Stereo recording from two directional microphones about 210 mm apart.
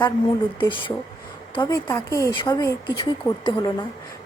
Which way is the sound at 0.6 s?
25° left (ahead or behind).